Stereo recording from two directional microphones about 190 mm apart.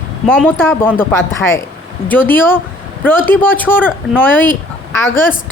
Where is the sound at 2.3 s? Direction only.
10° left (ahead or behind).